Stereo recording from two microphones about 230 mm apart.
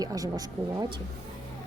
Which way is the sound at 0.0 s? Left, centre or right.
Centre.